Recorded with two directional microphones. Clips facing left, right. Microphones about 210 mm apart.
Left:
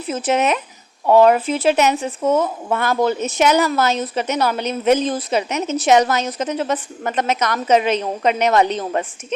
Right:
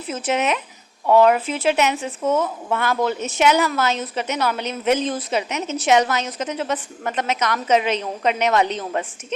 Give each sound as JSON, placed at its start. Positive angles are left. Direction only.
{"t": 0.1, "sound": "a woman's voice", "side_deg": 40}